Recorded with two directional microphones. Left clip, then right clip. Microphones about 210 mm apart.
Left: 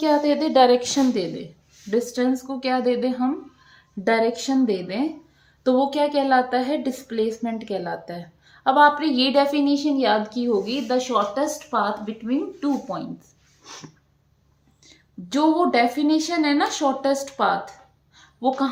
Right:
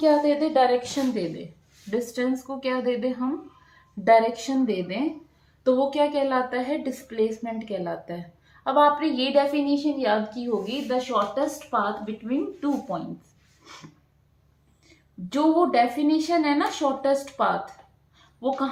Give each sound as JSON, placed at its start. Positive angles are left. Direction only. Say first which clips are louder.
{"t": 0.0, "sound": "a woman's voice", "louder": "even", "side_deg": 40}
{"t": 15.3, "sound": "a woman's voice", "louder": "left 2 dB", "side_deg": 45}